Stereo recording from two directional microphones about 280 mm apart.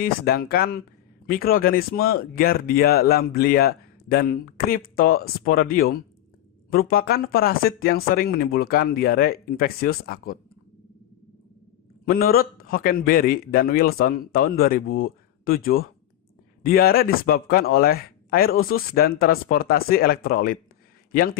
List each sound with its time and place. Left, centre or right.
0.0 s speech: left
12.0 s speech: left